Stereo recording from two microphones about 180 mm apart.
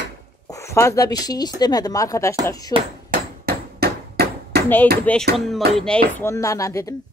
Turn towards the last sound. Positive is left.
turn(degrees=20)  # may be behind; listen again after turning